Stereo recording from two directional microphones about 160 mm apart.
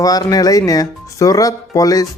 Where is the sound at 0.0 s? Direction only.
20° left (ahead or behind).